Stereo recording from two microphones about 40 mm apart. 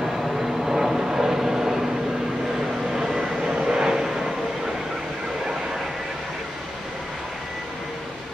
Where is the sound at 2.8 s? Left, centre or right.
Centre.